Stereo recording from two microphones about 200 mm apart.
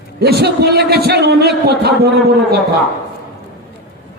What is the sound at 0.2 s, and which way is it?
A man's voice, 55° right (ahead or behind).